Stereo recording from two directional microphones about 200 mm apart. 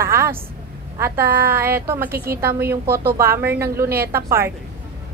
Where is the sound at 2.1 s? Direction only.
50° right (ahead or behind).